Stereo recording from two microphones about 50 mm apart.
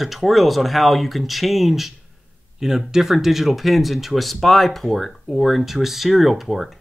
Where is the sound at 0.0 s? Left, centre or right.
Centre.